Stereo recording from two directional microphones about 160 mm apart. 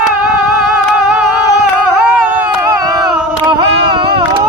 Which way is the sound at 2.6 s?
25° right (ahead or behind).